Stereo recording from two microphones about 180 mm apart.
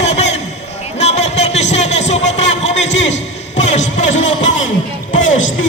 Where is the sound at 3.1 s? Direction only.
40° left (ahead or behind).